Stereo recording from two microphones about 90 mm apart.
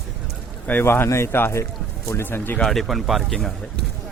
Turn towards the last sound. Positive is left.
turn(degrees=0)  # may be behind; listen again after turning